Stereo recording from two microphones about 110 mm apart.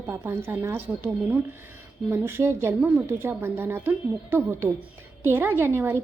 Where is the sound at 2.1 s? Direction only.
20° right (ahead or behind).